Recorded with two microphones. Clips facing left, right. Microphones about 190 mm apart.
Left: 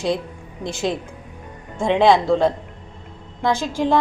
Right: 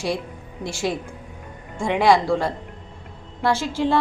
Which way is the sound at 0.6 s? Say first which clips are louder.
Left 2 dB; 20° left (ahead or behind).